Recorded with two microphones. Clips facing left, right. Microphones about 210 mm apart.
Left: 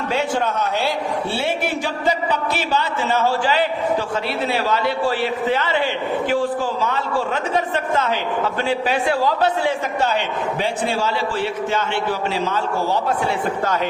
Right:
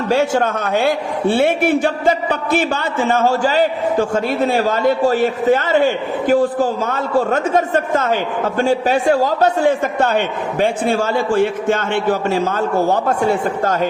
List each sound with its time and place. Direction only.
0.1 s a man's voice: 45° right (ahead or behind)